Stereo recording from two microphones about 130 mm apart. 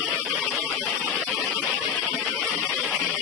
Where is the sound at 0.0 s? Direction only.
5° left (ahead or behind).